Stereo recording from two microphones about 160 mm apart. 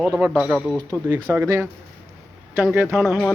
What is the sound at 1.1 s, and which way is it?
Speech, 15° right (ahead or behind).